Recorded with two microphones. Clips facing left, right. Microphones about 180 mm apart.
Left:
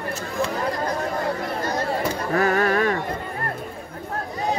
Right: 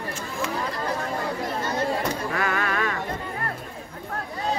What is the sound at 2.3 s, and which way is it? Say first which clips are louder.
Music: left 6 dB; 40° left (ahead or behind).